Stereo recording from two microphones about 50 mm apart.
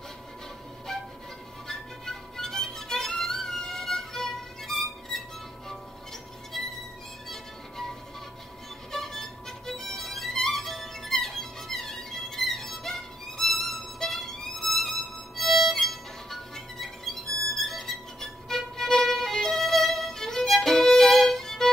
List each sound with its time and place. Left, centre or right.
1.7 s music: centre
6.5 s music: centre
8.9 s music: centre